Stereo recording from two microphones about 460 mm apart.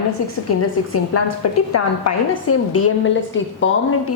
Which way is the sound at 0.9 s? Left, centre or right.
Left.